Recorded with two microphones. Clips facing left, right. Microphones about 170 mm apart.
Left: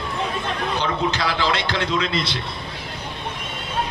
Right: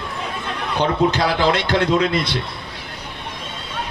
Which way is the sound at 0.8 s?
55° right (ahead or behind).